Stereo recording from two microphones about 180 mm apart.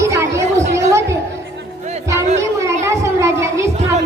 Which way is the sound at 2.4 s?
15° right (ahead or behind).